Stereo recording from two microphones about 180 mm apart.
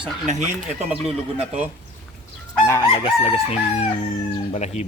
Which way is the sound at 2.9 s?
30° left (ahead or behind).